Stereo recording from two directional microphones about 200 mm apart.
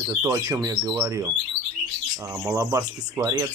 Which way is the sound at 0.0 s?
15° right (ahead or behind).